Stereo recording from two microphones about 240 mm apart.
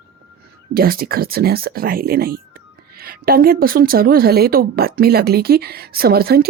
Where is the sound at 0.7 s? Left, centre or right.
Right.